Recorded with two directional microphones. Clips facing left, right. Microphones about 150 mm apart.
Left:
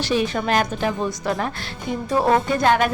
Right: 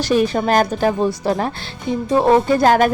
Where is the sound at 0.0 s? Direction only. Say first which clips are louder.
Right 5 dB; 45° right (ahead or behind).